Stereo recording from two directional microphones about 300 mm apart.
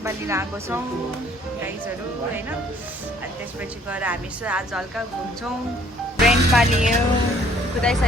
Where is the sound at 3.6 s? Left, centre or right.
Centre.